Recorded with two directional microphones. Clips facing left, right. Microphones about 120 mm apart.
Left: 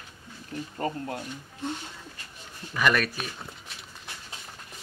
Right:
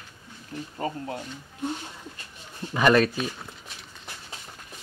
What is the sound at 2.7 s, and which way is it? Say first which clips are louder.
Speech: right 5 dB; 30° right (ahead or behind).